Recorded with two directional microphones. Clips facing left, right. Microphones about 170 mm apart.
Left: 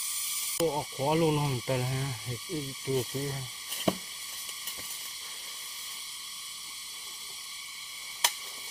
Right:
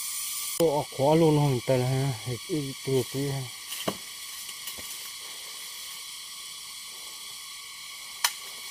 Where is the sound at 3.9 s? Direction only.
20° left (ahead or behind).